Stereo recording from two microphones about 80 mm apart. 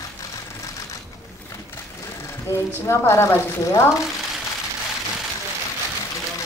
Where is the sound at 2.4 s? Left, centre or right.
Left.